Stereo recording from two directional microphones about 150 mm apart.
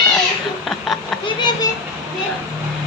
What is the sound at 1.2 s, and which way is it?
Children playing, 30° left (ahead or behind).